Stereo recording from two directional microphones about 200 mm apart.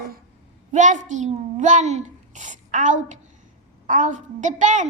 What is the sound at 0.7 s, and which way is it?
A child's voice, 40° right (ahead or behind).